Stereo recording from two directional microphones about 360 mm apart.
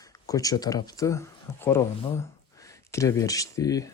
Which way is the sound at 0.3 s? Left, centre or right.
Centre.